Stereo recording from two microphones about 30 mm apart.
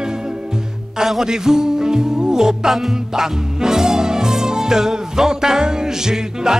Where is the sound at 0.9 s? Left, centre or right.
Centre.